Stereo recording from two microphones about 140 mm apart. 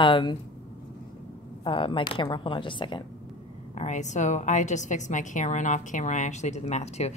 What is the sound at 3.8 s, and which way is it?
A woman's voice, 55° left (ahead or behind).